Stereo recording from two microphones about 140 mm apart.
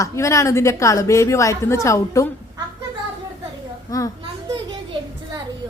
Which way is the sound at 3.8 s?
25° left (ahead or behind).